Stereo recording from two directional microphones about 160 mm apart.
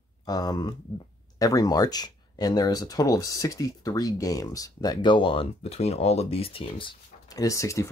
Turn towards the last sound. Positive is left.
turn(degrees=20)  # may be behind; listen again after turning